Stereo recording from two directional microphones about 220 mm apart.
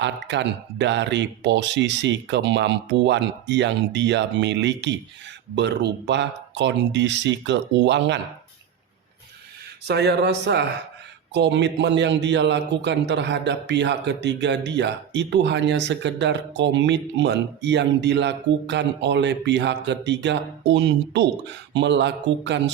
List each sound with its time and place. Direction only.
0.0 s a man's voice: 55° right (ahead or behind)
9.8 s a man's voice: 50° right (ahead or behind)